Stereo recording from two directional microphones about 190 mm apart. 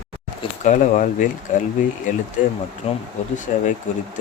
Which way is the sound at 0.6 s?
40° left (ahead or behind).